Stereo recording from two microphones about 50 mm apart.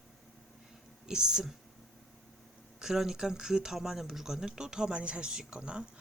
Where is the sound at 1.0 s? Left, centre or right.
Centre.